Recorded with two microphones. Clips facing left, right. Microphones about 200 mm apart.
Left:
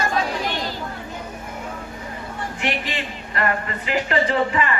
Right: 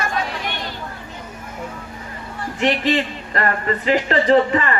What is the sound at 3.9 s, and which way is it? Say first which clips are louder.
Speech: right 5 dB; 35° right (ahead or behind).